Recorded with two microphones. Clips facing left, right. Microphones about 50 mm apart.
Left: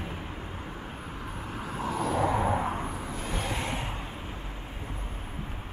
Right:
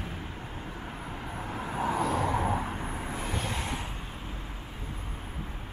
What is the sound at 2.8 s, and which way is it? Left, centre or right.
Vehicle, right.